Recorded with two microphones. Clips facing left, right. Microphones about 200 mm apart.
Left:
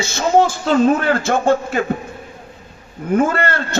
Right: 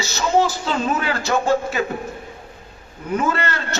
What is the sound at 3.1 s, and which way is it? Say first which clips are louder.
Speech: left 5 dB; 50° left (ahead or behind).